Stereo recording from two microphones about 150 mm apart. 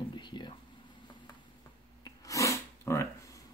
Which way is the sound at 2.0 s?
20° left (ahead or behind).